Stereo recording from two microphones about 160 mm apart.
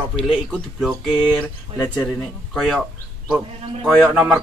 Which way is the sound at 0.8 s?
5° right (ahead or behind).